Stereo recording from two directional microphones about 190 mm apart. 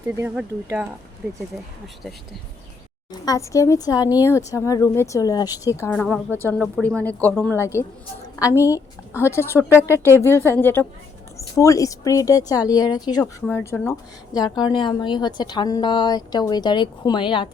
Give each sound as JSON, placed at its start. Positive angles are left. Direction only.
{"t": 0.2, "sound": "speech", "side_deg": -10}
{"t": 3.1, "sound": "speech", "side_deg": 20}